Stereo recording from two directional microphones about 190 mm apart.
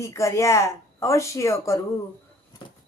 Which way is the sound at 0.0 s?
15° left (ahead or behind).